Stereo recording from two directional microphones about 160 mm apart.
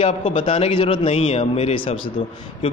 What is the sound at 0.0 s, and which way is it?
A man's voice, 35° left (ahead or behind).